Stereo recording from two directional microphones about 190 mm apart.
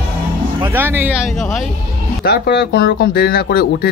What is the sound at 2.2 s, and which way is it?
Speech, 60° left (ahead or behind).